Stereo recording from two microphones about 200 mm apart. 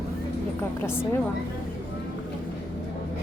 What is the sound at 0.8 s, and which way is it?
Speech, 10° left (ahead or behind).